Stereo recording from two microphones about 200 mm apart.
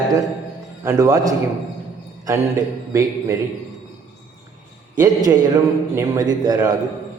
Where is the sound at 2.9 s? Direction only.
15° right (ahead or behind).